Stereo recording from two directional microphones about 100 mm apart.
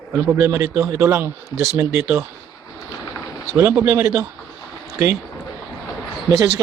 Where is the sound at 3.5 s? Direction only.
25° right (ahead or behind).